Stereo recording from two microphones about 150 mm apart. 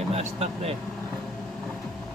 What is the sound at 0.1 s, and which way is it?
Speech, 45° right (ahead or behind).